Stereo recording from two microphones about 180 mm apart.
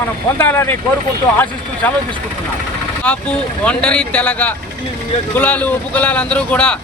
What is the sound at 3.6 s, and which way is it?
Speech, 5° left (ahead or behind).